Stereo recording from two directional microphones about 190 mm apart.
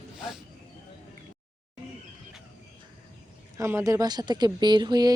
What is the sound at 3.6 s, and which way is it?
Speech, 15° right (ahead or behind).